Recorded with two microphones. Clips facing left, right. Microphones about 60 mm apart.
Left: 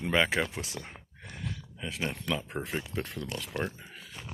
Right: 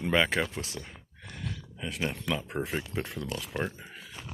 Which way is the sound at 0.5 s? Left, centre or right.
Left.